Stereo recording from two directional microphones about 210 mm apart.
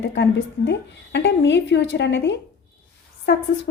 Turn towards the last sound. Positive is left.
turn(degrees=55)  # may be behind; listen again after turning